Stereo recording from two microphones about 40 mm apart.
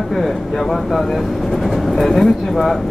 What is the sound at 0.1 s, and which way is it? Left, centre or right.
Speech, centre.